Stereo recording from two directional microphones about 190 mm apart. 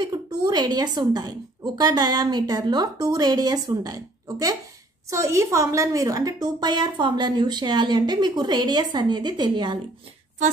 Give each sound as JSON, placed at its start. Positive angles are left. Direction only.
{"t": 0.0, "sound": "a woman's voice", "side_deg": -20}